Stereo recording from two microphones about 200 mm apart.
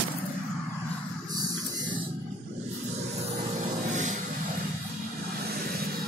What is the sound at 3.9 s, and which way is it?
Vehicle, 40° right (ahead or behind).